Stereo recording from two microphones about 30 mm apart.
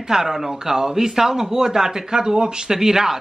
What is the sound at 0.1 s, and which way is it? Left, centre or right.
Speech, centre.